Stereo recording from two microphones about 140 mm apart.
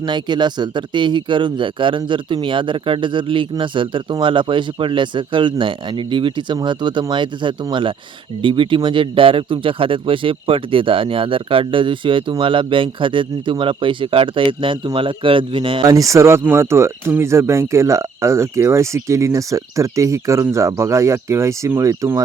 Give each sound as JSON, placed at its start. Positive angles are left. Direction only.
{"t": 0.0, "sound": "a man's voice", "side_deg": -30}